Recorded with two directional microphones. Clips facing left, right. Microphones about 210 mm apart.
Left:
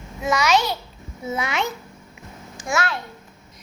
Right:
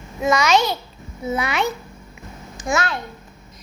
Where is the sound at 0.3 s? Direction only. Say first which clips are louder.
Right 2 dB; 5° left (ahead or behind).